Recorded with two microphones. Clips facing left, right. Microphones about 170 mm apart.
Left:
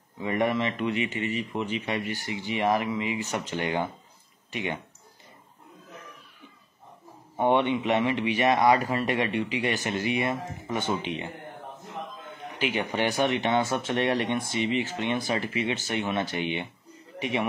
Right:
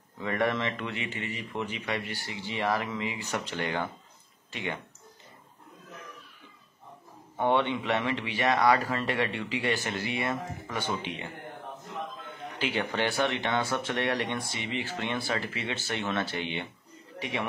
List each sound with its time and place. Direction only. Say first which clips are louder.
0.2 s speech: left 3 dB; 15° left (ahead or behind)
7.3 s speech: left 3 dB; 15° left (ahead or behind)
12.5 s a man's voice: left 2 dB; 15° left (ahead or behind)